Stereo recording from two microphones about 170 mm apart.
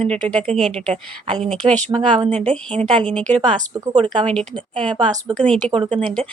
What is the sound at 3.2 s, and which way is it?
A woman's voice, 35° right (ahead or behind).